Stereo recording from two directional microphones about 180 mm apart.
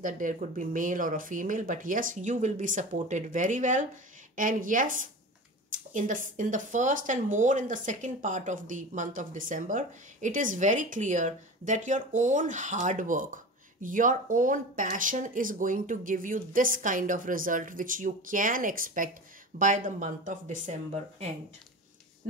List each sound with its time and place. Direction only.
0.0 s speech: 45° right (ahead or behind)